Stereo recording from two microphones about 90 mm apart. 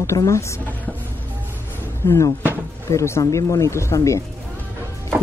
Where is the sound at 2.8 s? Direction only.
30° left (ahead or behind).